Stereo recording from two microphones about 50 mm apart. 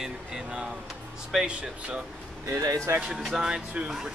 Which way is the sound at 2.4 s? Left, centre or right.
Right.